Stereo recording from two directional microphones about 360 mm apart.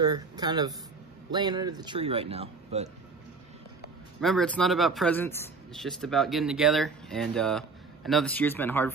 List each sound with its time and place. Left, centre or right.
0.0 s speech: centre
4.2 s speech: centre